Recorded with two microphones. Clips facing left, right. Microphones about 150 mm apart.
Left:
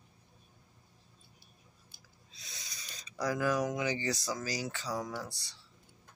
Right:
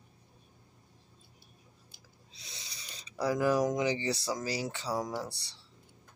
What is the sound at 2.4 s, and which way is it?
Speech, 30° right (ahead or behind).